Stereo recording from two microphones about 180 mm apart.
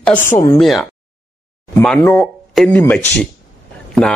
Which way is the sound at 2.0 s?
15° left (ahead or behind).